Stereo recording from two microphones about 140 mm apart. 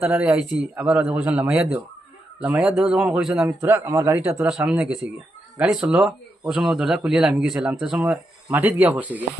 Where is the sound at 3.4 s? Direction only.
15° right (ahead or behind).